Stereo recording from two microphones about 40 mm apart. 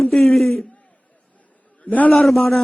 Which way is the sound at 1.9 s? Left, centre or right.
Left.